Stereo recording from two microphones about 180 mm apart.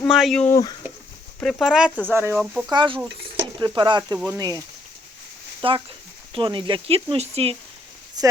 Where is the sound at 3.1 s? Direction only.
80° right.